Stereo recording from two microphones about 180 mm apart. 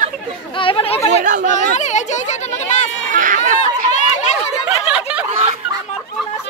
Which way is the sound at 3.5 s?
40° left (ahead or behind).